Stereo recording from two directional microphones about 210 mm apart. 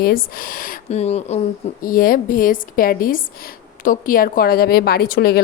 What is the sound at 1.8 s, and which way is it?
A woman's voice, 40° left (ahead or behind).